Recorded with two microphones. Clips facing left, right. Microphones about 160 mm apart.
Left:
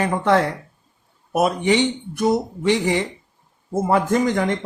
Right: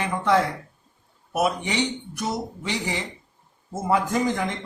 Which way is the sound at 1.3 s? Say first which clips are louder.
Left 6 dB; 45° left (ahead or behind).